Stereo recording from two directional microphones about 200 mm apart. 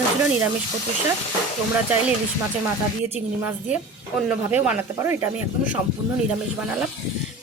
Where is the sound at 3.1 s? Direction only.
10° right (ahead or behind).